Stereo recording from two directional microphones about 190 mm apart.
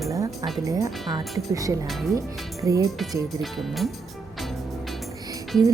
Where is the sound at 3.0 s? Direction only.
Centre (ahead or behind).